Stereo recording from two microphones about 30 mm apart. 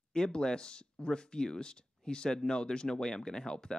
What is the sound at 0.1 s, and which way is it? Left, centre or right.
Speech, left.